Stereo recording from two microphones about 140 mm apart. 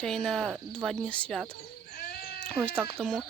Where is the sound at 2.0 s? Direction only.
90° left.